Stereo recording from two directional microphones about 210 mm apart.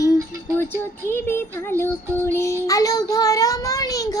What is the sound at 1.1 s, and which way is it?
Child singing, 10° left (ahead or behind).